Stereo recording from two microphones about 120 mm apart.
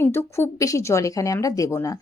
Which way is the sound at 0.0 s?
20° left (ahead or behind).